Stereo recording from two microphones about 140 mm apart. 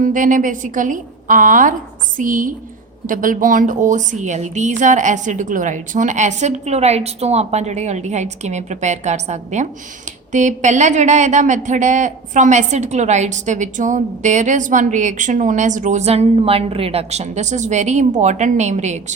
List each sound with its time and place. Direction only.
0.0 s a woman's voice: 70° right (ahead or behind); by 19.1 s 55° right (ahead or behind)